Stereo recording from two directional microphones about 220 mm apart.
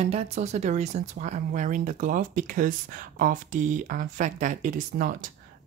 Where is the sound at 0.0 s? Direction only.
30° right (ahead or behind).